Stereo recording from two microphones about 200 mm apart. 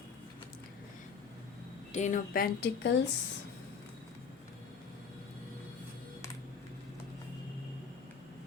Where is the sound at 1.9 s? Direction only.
35° left (ahead or behind).